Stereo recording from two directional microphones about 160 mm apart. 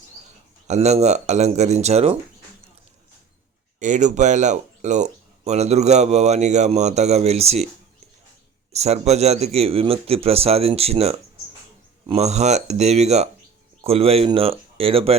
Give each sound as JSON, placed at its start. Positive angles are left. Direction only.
{"t": 0.7, "sound": "speech", "side_deg": -45}
{"t": 3.8, "sound": "speech", "side_deg": -50}
{"t": 8.7, "sound": "speech", "side_deg": -40}